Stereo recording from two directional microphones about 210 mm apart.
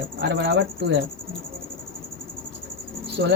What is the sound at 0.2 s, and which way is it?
Speech, 50° right (ahead or behind).